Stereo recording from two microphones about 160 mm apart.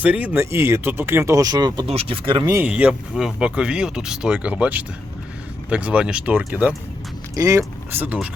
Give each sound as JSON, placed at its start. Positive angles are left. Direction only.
{"t": 0.0, "sound": "speech", "side_deg": -10}
{"t": 1.9, "sound": "speech", "side_deg": -35}
{"t": 2.5, "sound": "speech", "side_deg": -10}